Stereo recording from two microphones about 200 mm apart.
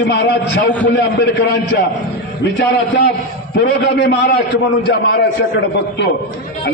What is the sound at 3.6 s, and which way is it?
A man's voice, 55° left (ahead or behind).